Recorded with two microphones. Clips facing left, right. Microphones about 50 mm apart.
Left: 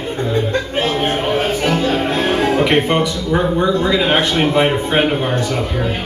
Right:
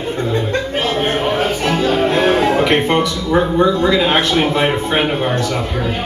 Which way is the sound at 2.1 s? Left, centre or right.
Centre.